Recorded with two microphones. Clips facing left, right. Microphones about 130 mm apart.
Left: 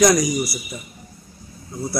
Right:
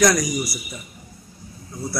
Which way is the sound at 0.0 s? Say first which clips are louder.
Left 3 dB; 20° left (ahead or behind).